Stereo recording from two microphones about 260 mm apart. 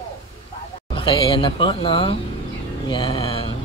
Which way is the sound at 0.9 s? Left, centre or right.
Centre.